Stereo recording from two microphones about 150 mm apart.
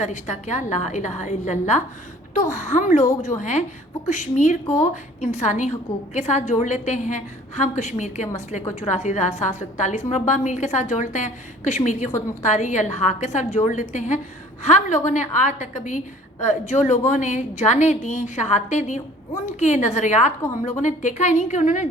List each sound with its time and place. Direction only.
0.0 s a woman's voice: 50° left (ahead or behind)
4.6 s speech: 20° left (ahead or behind)
5.2 s a woman's voice: 50° left (ahead or behind)